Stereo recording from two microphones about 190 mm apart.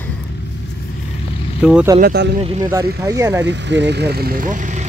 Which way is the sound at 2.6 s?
15° right (ahead or behind).